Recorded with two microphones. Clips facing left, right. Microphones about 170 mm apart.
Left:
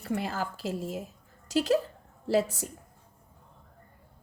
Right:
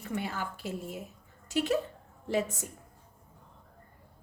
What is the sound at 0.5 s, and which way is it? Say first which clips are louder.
Speech: left 4 dB; 90° left.